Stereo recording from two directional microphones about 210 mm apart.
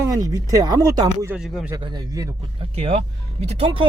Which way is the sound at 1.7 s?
20° right (ahead or behind).